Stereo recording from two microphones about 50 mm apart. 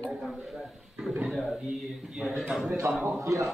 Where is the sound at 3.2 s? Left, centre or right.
Right.